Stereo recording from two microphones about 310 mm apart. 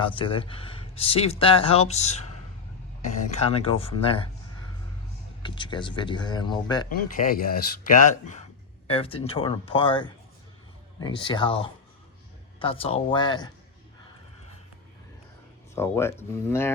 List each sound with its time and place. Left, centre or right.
0.0 s speech: centre
5.4 s speech: centre
7.2 s speech: left
15.7 s speech: centre